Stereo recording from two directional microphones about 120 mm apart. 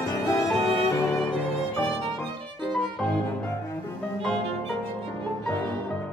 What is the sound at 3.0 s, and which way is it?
Music, centre (ahead or behind).